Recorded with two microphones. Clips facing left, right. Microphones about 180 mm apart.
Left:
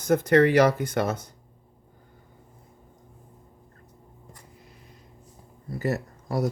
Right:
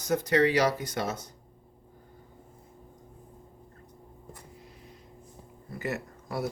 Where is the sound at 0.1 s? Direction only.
55° left (ahead or behind).